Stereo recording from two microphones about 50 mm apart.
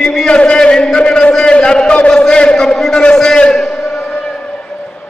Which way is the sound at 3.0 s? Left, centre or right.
Centre.